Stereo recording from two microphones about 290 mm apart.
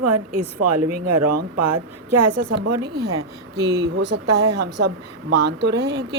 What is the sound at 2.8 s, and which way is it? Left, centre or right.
Speech, right.